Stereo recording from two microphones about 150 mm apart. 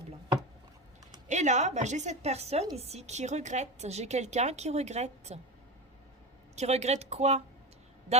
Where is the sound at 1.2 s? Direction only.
50° right (ahead or behind).